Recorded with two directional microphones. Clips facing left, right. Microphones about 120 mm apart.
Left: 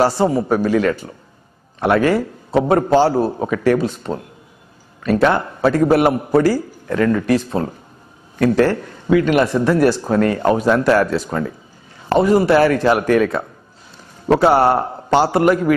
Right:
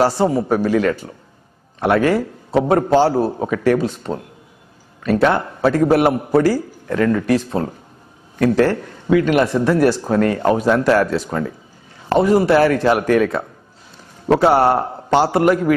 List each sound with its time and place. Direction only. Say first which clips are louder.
0.0 s speech: even; 20° left (ahead or behind)